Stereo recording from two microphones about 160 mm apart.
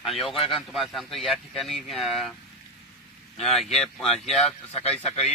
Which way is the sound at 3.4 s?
Centre (ahead or behind).